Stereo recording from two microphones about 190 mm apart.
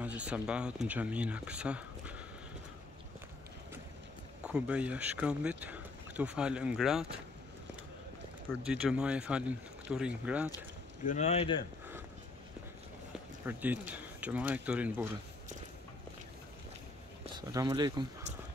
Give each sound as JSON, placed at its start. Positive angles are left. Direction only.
{"t": 0.0, "sound": "speech", "side_deg": -5}
{"t": 4.5, "sound": "speech", "side_deg": -5}
{"t": 8.6, "sound": "speech", "side_deg": -5}
{"t": 11.1, "sound": "speech", "side_deg": 35}
{"t": 13.5, "sound": "speech", "side_deg": -10}
{"t": 17.5, "sound": "speech", "side_deg": -20}